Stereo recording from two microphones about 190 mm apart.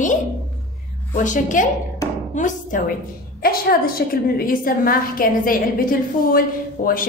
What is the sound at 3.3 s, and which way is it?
A woman's voice, 50° left (ahead or behind).